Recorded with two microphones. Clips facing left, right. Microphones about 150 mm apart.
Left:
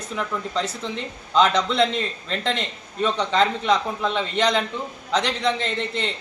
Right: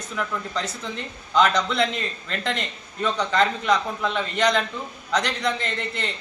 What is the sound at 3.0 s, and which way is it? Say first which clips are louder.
Speech: left 1 dB; 25° left (ahead or behind).